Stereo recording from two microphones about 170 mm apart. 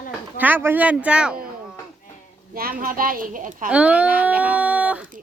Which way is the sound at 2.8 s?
55° right (ahead or behind).